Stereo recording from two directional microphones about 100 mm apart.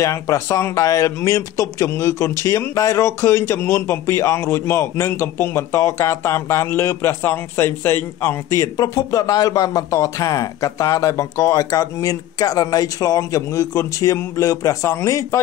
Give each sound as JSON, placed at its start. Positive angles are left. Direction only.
{"t": 0.0, "sound": "speech", "side_deg": 30}